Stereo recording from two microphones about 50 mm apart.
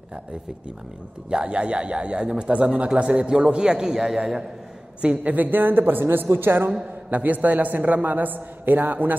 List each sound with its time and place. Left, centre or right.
1.3 s a man's voice: right
5.0 s a man's voice: right
7.1 s a man's voice: right